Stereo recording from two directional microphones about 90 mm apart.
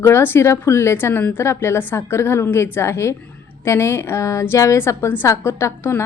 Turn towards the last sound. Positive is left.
turn(degrees=30)  # may be behind; listen again after turning